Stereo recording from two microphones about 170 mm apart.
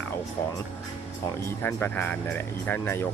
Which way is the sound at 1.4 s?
10° left (ahead or behind).